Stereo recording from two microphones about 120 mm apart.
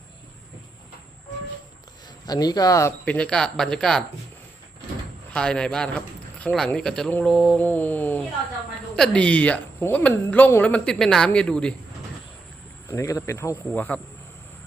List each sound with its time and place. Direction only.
2.2 s speech: 35° left (ahead or behind)
3.0 s a woman's voice: 10° left (ahead or behind)
5.3 s a woman's voice: 10° left (ahead or behind)
7.6 s a woman's voice: 15° left (ahead or behind)
12.9 s speech: 25° left (ahead or behind)
13.7 s a woman's voice: 10° left (ahead or behind)